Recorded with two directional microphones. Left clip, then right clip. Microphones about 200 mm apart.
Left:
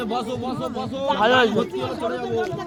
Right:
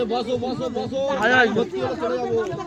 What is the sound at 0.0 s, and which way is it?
Speech, 55° left (ahead or behind).